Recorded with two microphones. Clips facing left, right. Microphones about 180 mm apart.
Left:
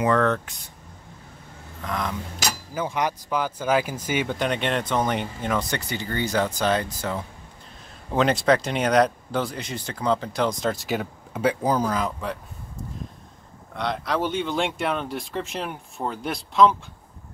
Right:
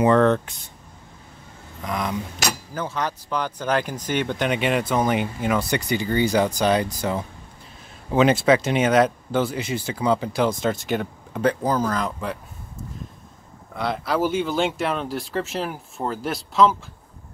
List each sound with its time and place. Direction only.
0.0 s speech: 25° right (ahead or behind)
1.8 s speech: 10° right (ahead or behind)
2.7 s speech: 10° left (ahead or behind)
4.5 s speech: 5° right (ahead or behind)
8.1 s speech: 5° right (ahead or behind)
13.7 s speech: 5° right (ahead or behind)